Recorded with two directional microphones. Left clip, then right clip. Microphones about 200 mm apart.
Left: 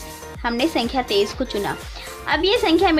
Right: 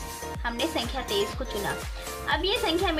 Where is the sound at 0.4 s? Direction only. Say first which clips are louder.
Left 8 dB; 35° left (ahead or behind).